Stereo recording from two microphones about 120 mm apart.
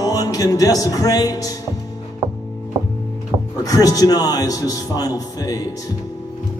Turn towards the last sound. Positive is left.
turn(degrees=30)  # may be behind; listen again after turning